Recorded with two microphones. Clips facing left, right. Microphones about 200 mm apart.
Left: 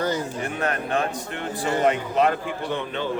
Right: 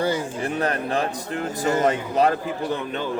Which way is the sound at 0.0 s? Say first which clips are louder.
Right 2 dB; 10° right (ahead or behind).